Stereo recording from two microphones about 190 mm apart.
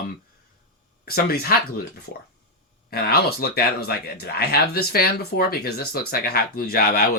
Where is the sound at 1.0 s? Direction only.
55° left (ahead or behind).